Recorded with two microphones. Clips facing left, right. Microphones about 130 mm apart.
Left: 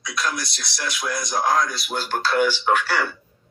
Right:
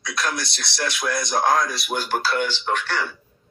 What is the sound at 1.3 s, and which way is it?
Speech, 55° right (ahead or behind).